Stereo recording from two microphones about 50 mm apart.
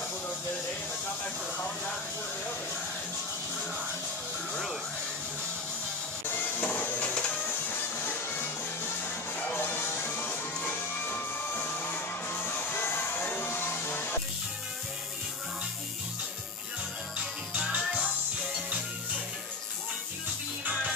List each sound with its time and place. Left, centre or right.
6.3 s printer: left
7.6 s music: left
17.2 s music: centre